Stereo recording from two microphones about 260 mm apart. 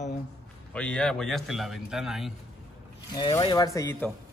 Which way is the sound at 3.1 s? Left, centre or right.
Centre.